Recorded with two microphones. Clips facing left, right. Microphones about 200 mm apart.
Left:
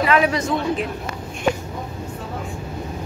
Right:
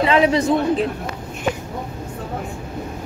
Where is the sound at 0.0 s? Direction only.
25° right (ahead or behind).